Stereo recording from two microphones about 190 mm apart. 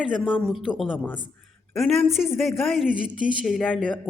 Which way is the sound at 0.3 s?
5° left (ahead or behind).